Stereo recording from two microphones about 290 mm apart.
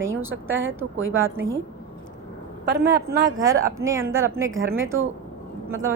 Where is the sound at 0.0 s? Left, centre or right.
Centre.